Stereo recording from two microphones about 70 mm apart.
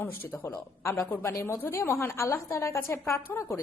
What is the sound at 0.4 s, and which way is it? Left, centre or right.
Speech, left.